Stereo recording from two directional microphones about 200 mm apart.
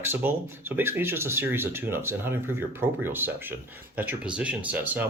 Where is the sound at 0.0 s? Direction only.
10° right (ahead or behind).